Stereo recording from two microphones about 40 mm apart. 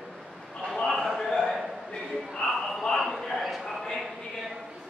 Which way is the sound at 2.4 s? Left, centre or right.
Centre.